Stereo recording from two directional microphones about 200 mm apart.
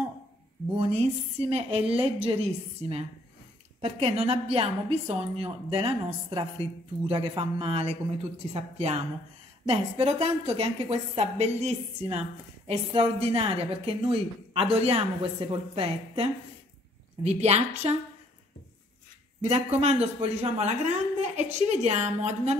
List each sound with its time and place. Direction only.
0.7 s a woman's voice: 30° right (ahead or behind)
19.4 s a woman's voice: 30° right (ahead or behind)